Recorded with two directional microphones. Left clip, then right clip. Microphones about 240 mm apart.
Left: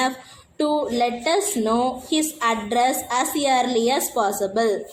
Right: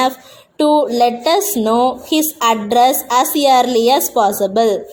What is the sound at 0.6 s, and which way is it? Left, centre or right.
A woman's voice, right.